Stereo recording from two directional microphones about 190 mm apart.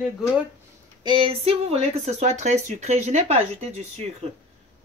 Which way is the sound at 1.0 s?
25° right (ahead or behind).